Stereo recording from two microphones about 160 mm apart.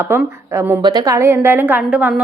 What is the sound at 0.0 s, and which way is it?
Speech, 15° right (ahead or behind).